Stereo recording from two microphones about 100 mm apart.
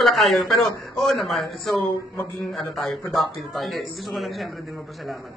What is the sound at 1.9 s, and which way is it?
Speech, 25° left (ahead or behind).